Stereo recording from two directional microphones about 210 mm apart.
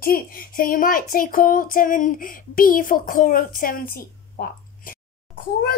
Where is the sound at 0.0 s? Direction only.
45° left (ahead or behind).